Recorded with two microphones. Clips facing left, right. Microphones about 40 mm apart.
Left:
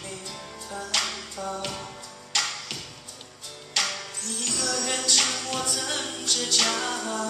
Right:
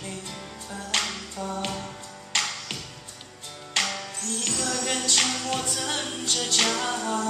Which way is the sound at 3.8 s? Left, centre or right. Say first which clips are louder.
Right 1 dB; right.